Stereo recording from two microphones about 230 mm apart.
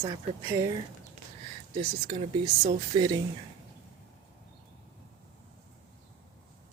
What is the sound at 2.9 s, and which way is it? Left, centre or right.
Speech, centre.